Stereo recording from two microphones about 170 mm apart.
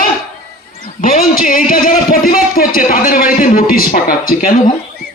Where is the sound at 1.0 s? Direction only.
55° left (ahead or behind).